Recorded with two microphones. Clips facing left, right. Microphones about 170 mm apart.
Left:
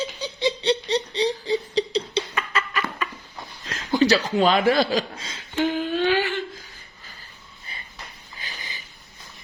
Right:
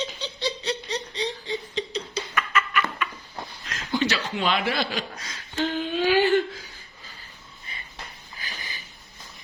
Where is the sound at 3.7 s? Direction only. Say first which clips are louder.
Left 7 dB; 35° left (ahead or behind).